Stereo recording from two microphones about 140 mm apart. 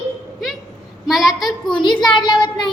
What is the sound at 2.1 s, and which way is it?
Speech, 35° left (ahead or behind).